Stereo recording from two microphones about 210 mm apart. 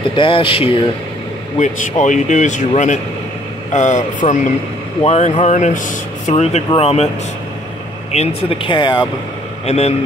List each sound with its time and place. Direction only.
0.1 s speech: 25° left (ahead or behind)
8.1 s speech: 30° left (ahead or behind)